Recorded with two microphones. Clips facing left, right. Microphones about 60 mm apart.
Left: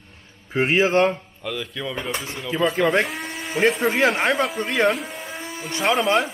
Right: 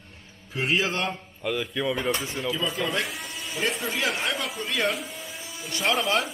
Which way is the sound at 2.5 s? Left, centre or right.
Left.